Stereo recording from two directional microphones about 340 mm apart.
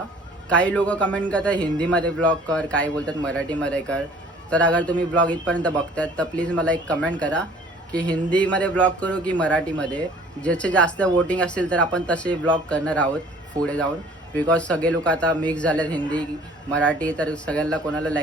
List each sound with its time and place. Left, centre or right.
0.4 s a man's voice: centre